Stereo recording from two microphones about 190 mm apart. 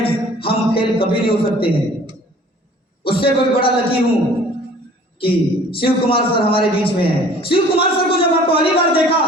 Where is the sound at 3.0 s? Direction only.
30° left (ahead or behind).